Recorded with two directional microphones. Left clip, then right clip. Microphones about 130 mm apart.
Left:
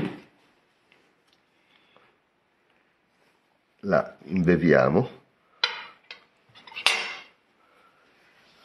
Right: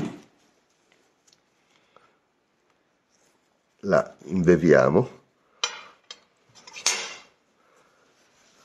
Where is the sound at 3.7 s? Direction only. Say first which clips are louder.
Right 2 dB; 30° right (ahead or behind).